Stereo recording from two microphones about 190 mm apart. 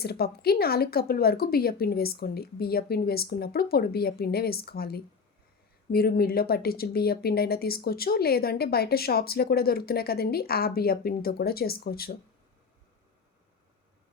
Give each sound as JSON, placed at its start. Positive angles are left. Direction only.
{"t": 0.0, "sound": "speech", "side_deg": 55}